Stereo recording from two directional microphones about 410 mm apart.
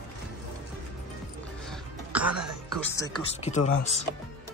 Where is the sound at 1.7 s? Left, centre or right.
Centre.